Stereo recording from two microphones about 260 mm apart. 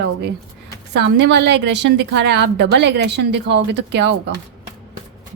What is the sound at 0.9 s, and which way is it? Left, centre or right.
A woman's voice, right.